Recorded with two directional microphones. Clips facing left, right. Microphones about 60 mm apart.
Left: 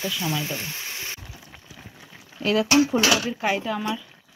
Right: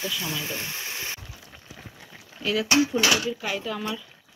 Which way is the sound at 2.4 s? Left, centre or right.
Left.